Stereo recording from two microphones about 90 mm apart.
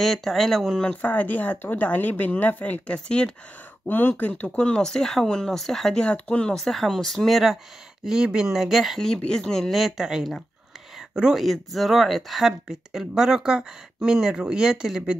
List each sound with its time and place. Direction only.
0.0 s speech: centre (ahead or behind)
1.0 s speech: 20° left (ahead or behind); by 15.1 s 5° right (ahead or behind)